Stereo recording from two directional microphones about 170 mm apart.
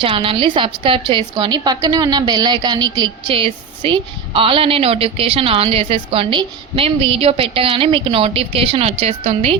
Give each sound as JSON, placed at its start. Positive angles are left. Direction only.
{"t": 0.0, "sound": "a woman's voice", "side_deg": -30}